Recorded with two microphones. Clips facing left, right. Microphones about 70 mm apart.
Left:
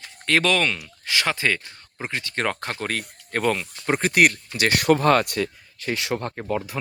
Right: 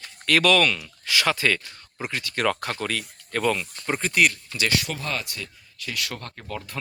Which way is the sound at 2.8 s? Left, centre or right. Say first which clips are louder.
Left 1 dB; left.